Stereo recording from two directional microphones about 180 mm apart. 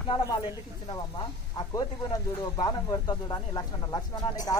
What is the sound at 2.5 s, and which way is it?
Speech, 20° left (ahead or behind).